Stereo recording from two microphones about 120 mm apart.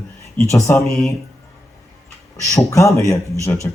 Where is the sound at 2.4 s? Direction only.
25° left (ahead or behind).